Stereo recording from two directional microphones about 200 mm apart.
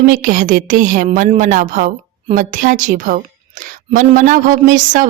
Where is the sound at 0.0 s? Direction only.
40° right (ahead or behind).